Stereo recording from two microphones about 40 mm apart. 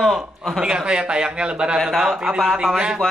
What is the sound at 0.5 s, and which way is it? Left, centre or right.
A man's voice, right.